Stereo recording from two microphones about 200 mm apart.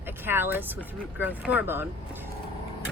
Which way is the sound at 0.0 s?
10° right (ahead or behind).